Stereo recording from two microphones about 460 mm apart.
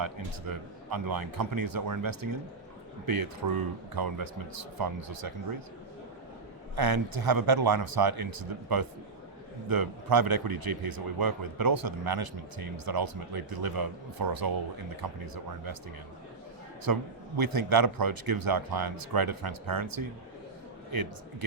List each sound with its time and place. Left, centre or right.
0.0 s a man's voice: right
6.7 s a man's voice: right
16.8 s a man's voice: right